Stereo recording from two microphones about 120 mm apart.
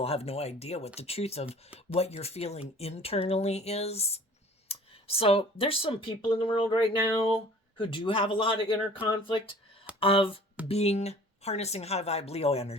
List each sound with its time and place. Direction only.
0.0 s speech: 55° left (ahead or behind)
10.7 s speech: 60° left (ahead or behind)